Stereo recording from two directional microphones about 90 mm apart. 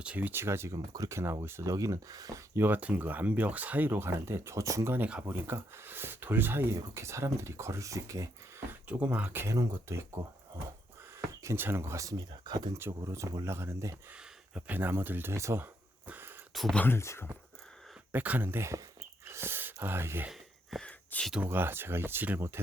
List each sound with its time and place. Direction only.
0.0 s speech: 15° right (ahead or behind); by 2.4 s 40° right (ahead or behind)
2.6 s speech: 20° right (ahead or behind)
8.9 s speech: 15° right (ahead or behind)
11.4 s speech: 25° right (ahead or behind); by 12.7 s 55° right (ahead or behind)
13.1 s speech: 35° right (ahead or behind)
16.0 s a sound: 20° right (ahead or behind)
16.7 s speech: 25° left (ahead or behind)
18.1 s speech: 20° right (ahead or behind)
19.2 s a sound: 30° right (ahead or behind)
20.8 s a sound: 10° left (ahead or behind)
21.4 s speech: 25° right (ahead or behind)